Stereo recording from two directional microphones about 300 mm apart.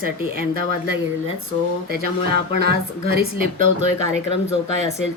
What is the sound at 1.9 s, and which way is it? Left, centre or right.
Speech, right.